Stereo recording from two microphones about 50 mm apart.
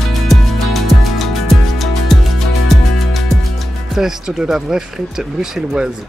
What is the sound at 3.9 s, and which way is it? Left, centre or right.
Speech, centre.